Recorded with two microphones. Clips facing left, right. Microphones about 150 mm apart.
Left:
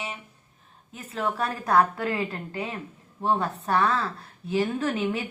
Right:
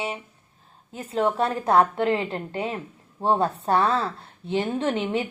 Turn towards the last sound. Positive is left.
turn(degrees=-25)  # may be behind; listen again after turning